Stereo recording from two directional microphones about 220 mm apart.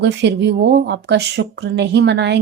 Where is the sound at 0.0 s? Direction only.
50° right (ahead or behind).